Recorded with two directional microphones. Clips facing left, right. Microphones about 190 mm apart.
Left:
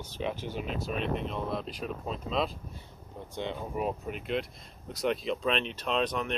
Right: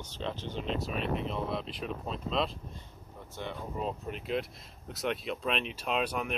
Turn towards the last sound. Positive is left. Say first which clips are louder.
# left 2 dB
turn(degrees=-10)  # may be behind; listen again after turning